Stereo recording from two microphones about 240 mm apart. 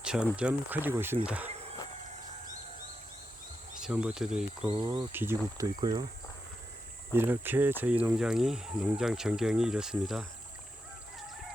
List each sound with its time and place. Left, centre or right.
0.0 s a sound: centre
0.3 s speech: centre
3.8 s speech: centre
4.6 s speech: right
5.1 s speech: centre
7.1 s speech: centre